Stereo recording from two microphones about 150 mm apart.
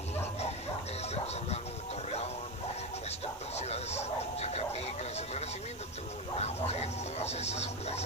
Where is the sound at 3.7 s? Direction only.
45° left (ahead or behind).